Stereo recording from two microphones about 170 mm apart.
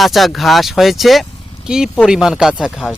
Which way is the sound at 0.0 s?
Centre (ahead or behind).